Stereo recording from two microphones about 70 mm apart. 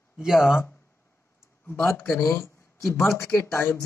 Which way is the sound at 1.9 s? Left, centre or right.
Left.